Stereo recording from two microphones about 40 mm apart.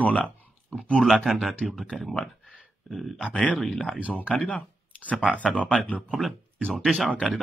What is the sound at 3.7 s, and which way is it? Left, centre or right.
Speech, centre.